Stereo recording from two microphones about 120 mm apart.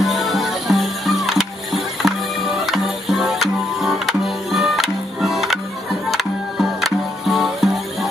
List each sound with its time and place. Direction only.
0.0 s music: centre (ahead or behind)